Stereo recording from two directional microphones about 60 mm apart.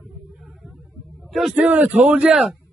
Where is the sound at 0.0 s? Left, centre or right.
Centre.